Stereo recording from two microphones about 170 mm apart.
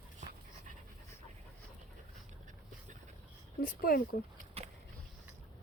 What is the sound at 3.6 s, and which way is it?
Speech, 60° left (ahead or behind).